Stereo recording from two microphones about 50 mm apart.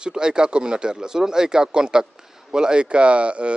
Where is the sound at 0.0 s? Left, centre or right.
Centre.